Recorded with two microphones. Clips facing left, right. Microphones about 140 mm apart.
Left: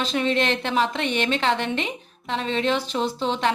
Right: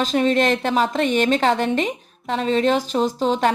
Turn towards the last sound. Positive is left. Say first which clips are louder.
# right 5 dB
turn(degrees=-40)  # may be behind; listen again after turning